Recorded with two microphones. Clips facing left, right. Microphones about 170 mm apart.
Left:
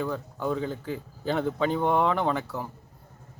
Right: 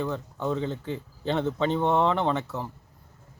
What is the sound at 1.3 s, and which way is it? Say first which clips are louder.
Speech: even; 5° left (ahead or behind).